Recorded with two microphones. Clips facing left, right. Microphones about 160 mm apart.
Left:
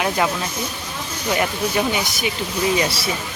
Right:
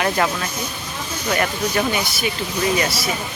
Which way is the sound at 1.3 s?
10° left (ahead or behind).